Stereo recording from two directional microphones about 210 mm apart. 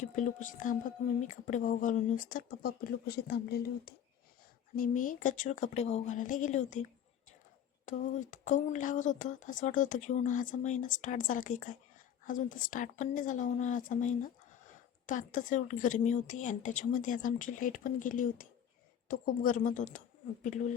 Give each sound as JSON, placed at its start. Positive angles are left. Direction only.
{"t": 0.0, "sound": "speech", "side_deg": 35}
{"t": 7.9, "sound": "speech", "side_deg": 35}